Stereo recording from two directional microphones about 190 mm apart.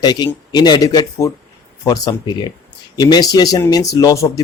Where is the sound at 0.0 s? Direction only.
20° left (ahead or behind).